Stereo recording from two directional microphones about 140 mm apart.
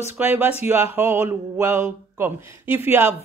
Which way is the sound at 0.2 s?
15° right (ahead or behind).